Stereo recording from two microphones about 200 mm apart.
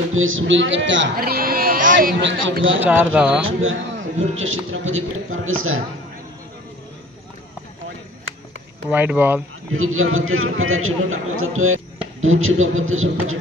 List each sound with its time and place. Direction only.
0.1 s a man's voice: 80° right
1.1 s speech: 50° right (ahead or behind)
2.2 s a man's voice: 70° right (ahead or behind)
2.8 s speech: 10° right (ahead or behind)
3.4 s a man's voice: 75° right (ahead or behind); by 5.8 s 90° right
8.9 s speech: 10° right (ahead or behind)
9.7 s a man's voice: 90° right